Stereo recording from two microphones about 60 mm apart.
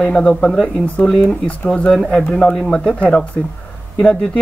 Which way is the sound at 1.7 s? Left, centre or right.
Centre.